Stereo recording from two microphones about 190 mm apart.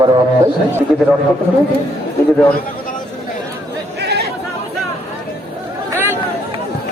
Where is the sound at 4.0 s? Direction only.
60° right (ahead or behind).